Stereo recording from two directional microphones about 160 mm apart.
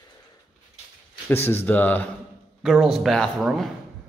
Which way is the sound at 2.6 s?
Centre (ahead or behind).